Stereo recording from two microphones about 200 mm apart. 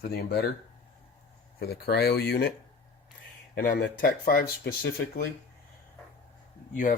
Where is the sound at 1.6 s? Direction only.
50° left (ahead or behind).